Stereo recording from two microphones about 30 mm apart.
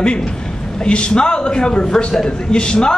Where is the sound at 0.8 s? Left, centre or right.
Left.